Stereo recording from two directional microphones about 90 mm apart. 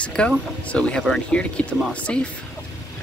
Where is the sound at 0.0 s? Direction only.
10° left (ahead or behind).